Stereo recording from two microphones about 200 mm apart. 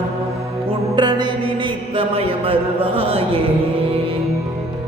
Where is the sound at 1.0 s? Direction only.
25° right (ahead or behind).